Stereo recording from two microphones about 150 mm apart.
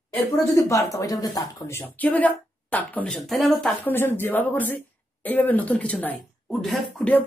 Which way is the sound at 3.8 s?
15° left (ahead or behind).